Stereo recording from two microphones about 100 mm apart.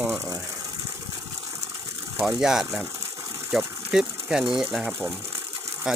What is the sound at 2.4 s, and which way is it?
Speech, 5° right (ahead or behind).